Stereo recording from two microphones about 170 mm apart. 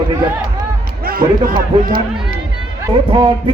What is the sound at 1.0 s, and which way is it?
Speech, 60° right (ahead or behind).